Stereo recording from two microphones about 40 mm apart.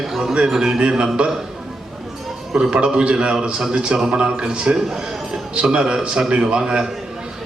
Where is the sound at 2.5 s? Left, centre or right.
Right.